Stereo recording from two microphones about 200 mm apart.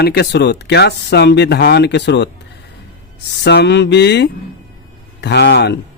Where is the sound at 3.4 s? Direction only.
60° left (ahead or behind).